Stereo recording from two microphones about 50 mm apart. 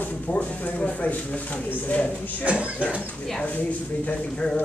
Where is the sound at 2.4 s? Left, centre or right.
Right.